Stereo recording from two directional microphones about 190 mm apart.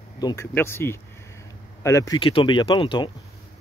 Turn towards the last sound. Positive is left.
turn(degrees=25)  # may be behind; listen again after turning